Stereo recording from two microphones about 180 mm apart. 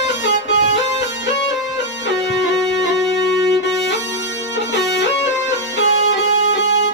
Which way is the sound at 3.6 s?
70° left (ahead or behind).